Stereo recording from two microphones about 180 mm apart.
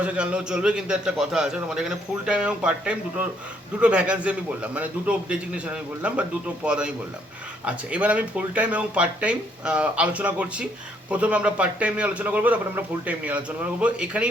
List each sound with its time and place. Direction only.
0.0 s a man's voice: 5° right (ahead or behind)